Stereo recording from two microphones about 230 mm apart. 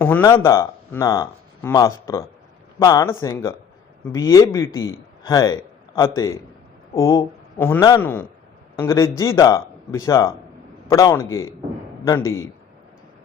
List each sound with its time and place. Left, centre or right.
0.0 s speech: centre
12.2 s a man's voice: left